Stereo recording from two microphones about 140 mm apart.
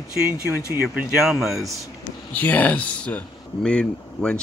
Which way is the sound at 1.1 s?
5° right (ahead or behind).